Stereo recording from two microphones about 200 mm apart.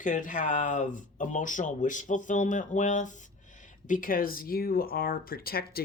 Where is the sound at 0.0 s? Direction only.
40° left (ahead or behind).